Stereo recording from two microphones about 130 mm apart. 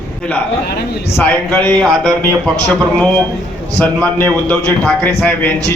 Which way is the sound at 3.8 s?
10° left (ahead or behind).